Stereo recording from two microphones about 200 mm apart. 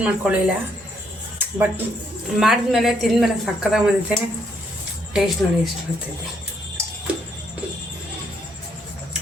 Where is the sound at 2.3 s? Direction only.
Centre (ahead or behind).